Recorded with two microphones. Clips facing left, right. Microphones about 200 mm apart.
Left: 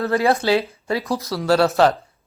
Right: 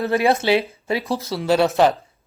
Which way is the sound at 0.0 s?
20° right (ahead or behind).